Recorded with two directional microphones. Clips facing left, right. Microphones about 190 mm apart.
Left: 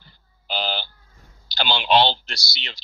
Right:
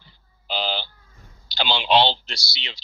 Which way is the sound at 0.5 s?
45° left (ahead or behind).